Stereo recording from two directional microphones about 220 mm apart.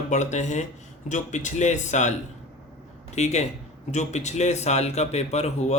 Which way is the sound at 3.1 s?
30° left (ahead or behind).